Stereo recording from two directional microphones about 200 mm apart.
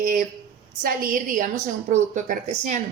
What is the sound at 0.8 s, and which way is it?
Speech, 45° right (ahead or behind).